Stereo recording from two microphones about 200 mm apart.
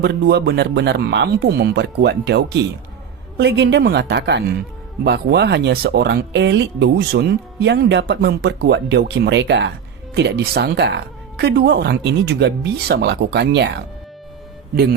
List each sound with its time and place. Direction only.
0.0 s speech: 55° right (ahead or behind)